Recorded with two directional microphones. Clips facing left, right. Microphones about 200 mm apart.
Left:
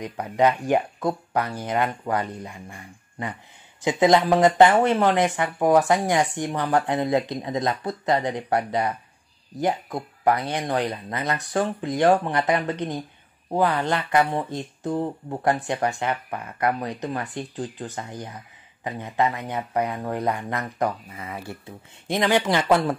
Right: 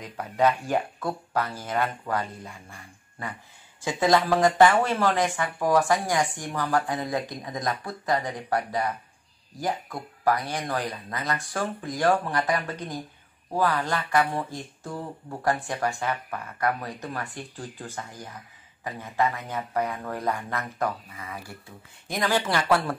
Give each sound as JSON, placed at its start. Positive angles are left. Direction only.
{"t": 0.2, "sound": "speech", "side_deg": 15}